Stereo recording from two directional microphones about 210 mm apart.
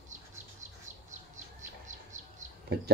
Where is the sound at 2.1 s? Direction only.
35° right (ahead or behind).